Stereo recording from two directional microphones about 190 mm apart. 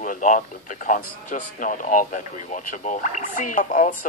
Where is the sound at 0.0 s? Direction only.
45° left (ahead or behind).